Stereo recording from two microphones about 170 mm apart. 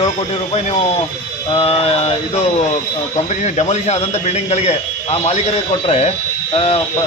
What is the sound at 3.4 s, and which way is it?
Speech, 40° left (ahead or behind).